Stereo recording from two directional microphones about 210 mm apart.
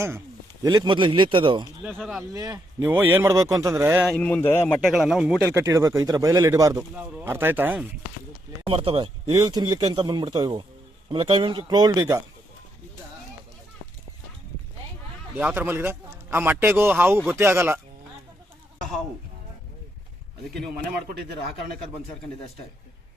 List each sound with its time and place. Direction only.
0.6 s speech: 20° right (ahead or behind)
1.8 s speech: 5° right (ahead or behind)
2.3 s speech: 15° right (ahead or behind)
4.0 s a man's voice: 5° left (ahead or behind)
4.9 s speech: centre (ahead or behind)
5.5 s speech: 15° right (ahead or behind)
8.6 s speech: 25° right (ahead or behind)
15.4 s speech: 10° right (ahead or behind)